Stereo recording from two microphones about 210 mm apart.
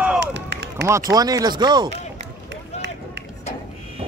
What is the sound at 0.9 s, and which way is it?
Speech, 15° right (ahead or behind).